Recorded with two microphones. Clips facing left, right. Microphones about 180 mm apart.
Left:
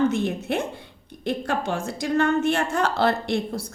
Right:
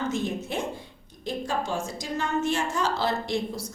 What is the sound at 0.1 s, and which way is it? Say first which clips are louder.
A woman's voice: left 4 dB; 65° left (ahead or behind).